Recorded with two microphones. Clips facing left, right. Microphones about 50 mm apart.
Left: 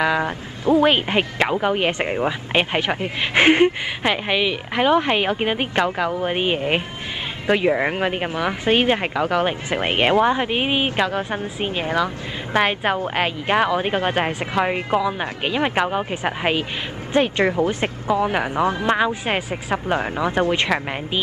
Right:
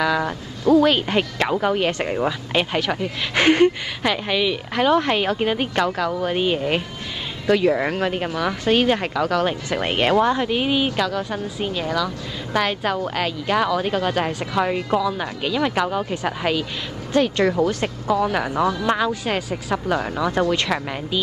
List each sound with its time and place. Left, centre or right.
0.0 s a woman's voice: left